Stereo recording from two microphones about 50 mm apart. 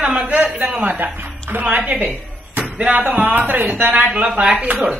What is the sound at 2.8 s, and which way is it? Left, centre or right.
Speech, right.